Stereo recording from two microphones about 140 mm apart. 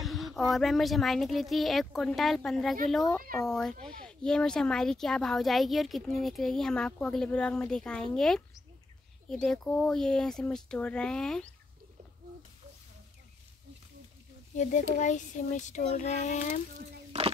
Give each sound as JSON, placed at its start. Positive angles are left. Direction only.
{"t": 0.0, "sound": "a sound", "side_deg": 0}
{"t": 0.5, "sound": "speech", "side_deg": 0}
{"t": 14.5, "sound": "speech", "side_deg": 60}